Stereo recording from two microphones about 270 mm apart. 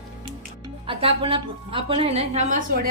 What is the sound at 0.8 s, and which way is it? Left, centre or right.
A woman's voice, centre.